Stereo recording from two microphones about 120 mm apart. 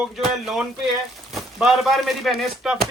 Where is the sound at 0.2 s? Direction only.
5° right (ahead or behind).